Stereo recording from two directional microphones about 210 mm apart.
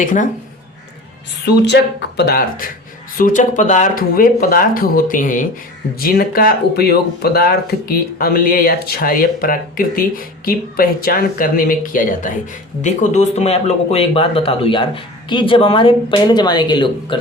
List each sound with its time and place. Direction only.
0.0 s speech: 40° left (ahead or behind)
1.6 s speech: 55° left (ahead or behind); by 17.2 s 20° left (ahead or behind)